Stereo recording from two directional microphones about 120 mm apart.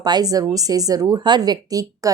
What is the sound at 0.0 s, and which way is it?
A woman's voice, 35° right (ahead or behind).